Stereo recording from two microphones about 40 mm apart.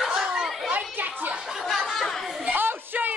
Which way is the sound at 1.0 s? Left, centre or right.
Right.